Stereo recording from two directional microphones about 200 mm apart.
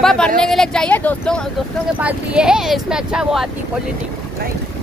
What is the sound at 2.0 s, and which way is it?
Speech, 5° right (ahead or behind).